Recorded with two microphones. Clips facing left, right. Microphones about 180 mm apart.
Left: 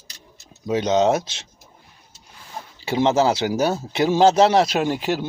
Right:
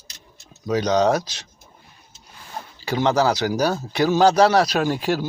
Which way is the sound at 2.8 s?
25° left (ahead or behind).